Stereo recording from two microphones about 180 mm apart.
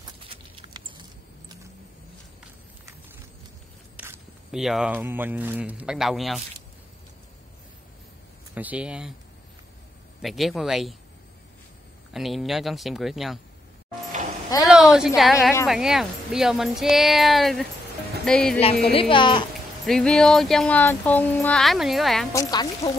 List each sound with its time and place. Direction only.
0.0 s a sound: 30° right (ahead or behind)
3.9 s a sound: 10° right (ahead or behind)
4.6 s speech: centre (ahead or behind)
8.5 s speech: 5° right (ahead or behind)
10.2 s speech: centre (ahead or behind)
12.1 s speech: centre (ahead or behind)
14.6 s speech: 5° right (ahead or behind)
18.9 s speech: 30° left (ahead or behind)
19.9 s speech: 5° left (ahead or behind)
22.3 s speech: 20° left (ahead or behind)